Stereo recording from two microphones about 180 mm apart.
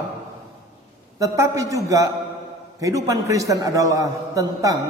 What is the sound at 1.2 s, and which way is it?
Speech, 15° right (ahead or behind).